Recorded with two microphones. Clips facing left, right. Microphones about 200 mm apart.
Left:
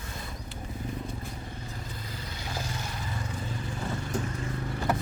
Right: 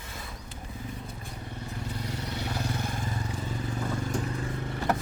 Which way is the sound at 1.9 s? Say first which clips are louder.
Right 6 dB; 75° right (ahead or behind).